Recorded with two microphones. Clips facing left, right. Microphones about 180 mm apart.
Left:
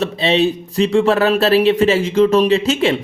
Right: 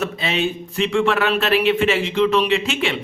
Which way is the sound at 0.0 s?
30° left (ahead or behind).